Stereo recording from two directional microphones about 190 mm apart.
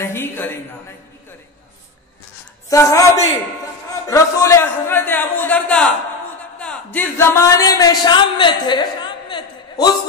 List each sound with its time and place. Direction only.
0.0 s a man's voice: 10° left (ahead or behind)
2.7 s a man's voice: 15° left (ahead or behind)